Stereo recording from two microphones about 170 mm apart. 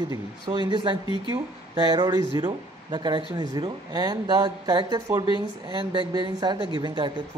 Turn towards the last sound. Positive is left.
turn(degrees=-25)  # may be behind; listen again after turning